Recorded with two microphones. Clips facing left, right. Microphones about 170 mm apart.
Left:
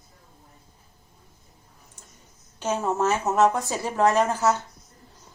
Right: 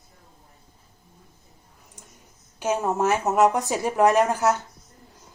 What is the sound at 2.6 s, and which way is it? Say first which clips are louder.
Speech: right 1 dB; 10° right (ahead or behind).